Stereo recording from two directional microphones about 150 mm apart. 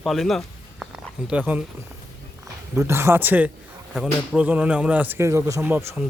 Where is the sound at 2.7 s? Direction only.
15° right (ahead or behind).